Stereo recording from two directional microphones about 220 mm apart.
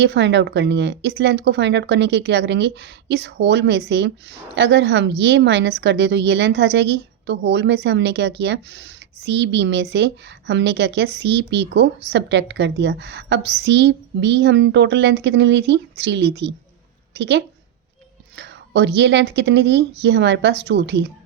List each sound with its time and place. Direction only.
0.0 s a woman's voice: 50° right (ahead or behind)